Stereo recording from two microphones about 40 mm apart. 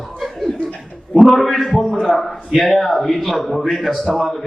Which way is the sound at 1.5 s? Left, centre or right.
Left.